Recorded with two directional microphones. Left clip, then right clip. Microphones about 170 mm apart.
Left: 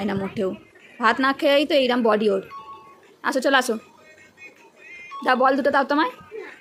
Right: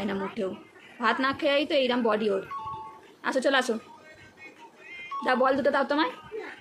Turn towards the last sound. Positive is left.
turn(degrees=30)  # may be behind; listen again after turning